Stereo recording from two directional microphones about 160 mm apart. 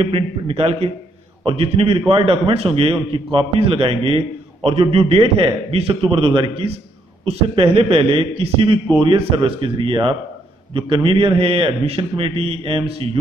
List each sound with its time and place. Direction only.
0.0 s a man's voice: 40° right (ahead or behind)